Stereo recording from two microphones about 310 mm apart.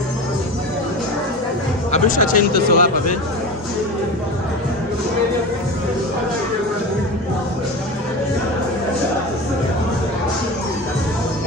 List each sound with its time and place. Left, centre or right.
1.9 s speech: left